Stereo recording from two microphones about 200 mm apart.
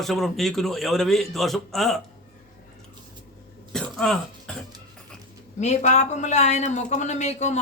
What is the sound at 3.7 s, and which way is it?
Throat clearing, 5° left (ahead or behind).